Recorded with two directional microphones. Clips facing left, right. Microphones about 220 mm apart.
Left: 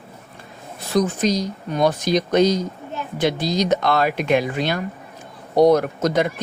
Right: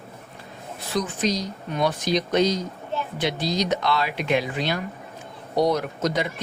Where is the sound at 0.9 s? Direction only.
45° left (ahead or behind).